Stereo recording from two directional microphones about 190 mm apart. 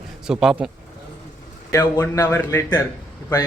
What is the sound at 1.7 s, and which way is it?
A man's voice, 15° left (ahead or behind).